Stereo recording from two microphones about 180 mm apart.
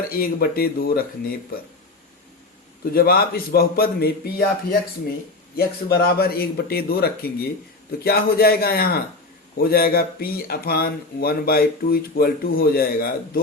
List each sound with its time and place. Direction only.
0.1 s speech: 55° left (ahead or behind)
2.8 s speech: 55° left (ahead or behind)